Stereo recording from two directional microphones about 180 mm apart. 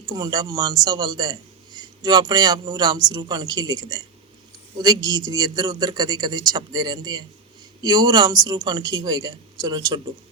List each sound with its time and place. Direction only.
0.0 s a man's voice: 20° right (ahead or behind)